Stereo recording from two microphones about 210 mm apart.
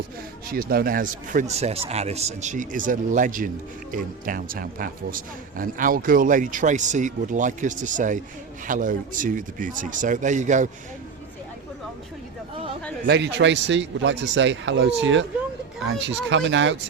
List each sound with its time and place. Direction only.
0.4 s a man's voice: 45° right (ahead or behind)
13.1 s speech: 55° right (ahead or behind)